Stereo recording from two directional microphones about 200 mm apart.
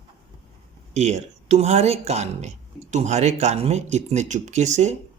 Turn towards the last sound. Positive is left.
turn(degrees=-35)  # may be behind; listen again after turning